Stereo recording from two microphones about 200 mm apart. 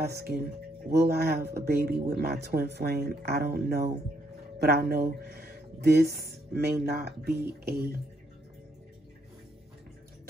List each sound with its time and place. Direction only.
0.0 s speech: 50° right (ahead or behind)